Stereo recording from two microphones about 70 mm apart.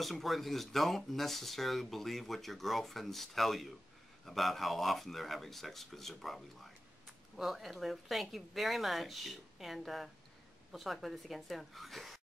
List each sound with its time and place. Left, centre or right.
0.0 s speech: centre